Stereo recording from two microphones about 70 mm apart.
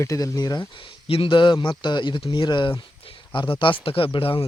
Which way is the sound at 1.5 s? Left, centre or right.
Left.